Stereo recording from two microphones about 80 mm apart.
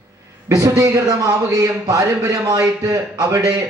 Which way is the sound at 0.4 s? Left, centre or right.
Right.